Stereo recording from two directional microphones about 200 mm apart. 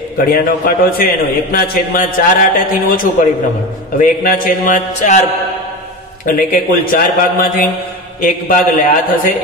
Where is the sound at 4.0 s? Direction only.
45° left (ahead or behind).